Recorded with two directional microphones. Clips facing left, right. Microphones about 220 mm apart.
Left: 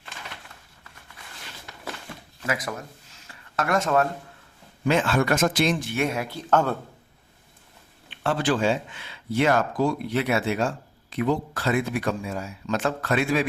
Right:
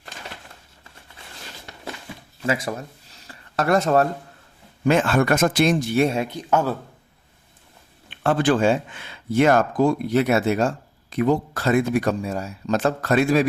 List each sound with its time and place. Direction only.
2.5 s speech: 30° right (ahead or behind)
4.9 s speech: 50° right (ahead or behind); by 6.4 s 25° right (ahead or behind)
6.5 s a man's voice: 10° right (ahead or behind)
8.1 s speech: 50° right (ahead or behind)